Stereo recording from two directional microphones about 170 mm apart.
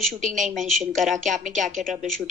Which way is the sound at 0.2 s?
50° right (ahead or behind).